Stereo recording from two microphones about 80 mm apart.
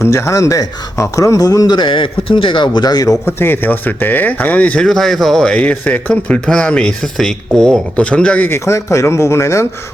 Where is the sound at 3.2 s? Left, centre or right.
Left.